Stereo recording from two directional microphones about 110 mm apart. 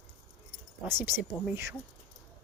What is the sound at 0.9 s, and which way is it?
Speech, 20° right (ahead or behind).